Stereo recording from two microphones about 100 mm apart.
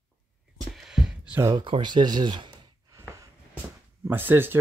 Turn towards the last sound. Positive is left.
turn(degrees=-20)  # may be behind; listen again after turning